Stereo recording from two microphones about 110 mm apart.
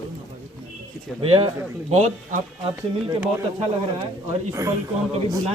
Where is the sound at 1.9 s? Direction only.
90° right.